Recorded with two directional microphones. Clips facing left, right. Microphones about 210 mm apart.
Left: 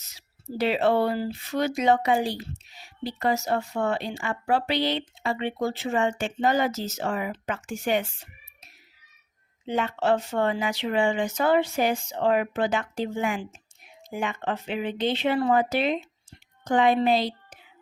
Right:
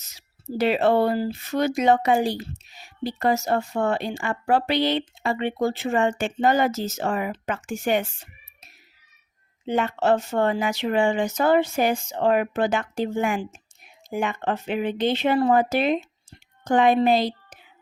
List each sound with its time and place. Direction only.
0.1 s speech: 45° right (ahead or behind)
9.6 s speech: 55° right (ahead or behind)